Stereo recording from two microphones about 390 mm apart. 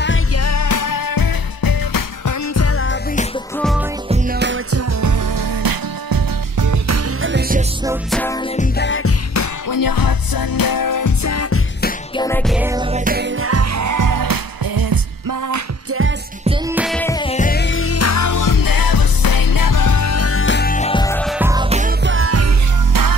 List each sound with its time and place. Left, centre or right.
0.0 s music: left
4.1 s music: right
7.2 s music: right
7.8 s music: centre
8.5 s music: left
9.3 s music: left
12.2 s music: centre; by 15.6 s right
15.9 s music: right
16.4 s music: centre; by 22.5 s right